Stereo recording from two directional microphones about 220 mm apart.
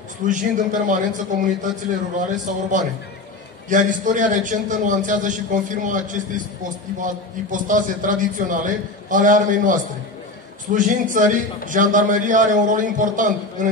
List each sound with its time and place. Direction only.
0.2 s a man's voice: 35° right (ahead or behind)